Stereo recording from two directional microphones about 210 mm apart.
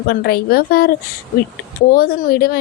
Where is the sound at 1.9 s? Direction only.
45° left (ahead or behind).